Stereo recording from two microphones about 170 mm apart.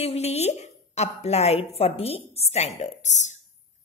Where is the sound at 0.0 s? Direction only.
40° left (ahead or behind).